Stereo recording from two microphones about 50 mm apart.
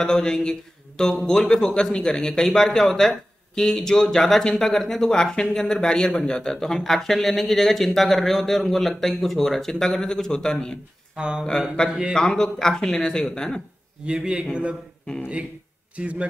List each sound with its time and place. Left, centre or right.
0.0 s speech: centre
11.1 s a man's voice: centre
12.1 s speech: centre
14.0 s a man's voice: centre
16.0 s a man's voice: right